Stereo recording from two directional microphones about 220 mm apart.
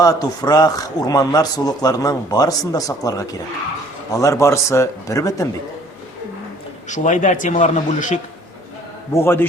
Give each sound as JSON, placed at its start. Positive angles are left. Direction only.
{"t": 0.0, "sound": "a man's voice", "side_deg": 15}
{"t": 6.8, "sound": "a man's voice", "side_deg": 35}
{"t": 9.1, "sound": "a man's voice", "side_deg": 10}